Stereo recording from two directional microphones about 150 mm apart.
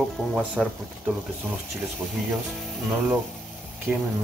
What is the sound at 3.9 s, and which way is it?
Speech, 10° right (ahead or behind).